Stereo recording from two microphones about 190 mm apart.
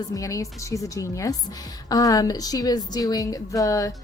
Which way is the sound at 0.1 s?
15° left (ahead or behind).